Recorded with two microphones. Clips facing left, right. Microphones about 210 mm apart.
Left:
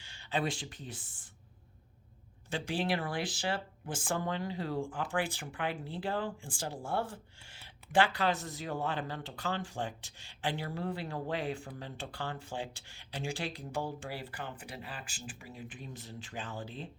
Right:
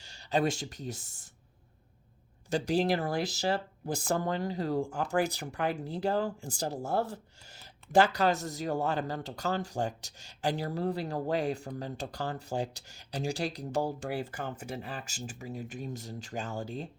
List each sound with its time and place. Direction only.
0.0 s speech: 40° right (ahead or behind)
2.5 s speech: 40° right (ahead or behind)